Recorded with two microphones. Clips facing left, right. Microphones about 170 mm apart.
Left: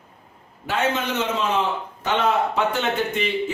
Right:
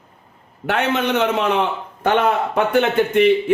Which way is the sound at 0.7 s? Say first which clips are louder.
Right 4 dB; 65° right (ahead or behind).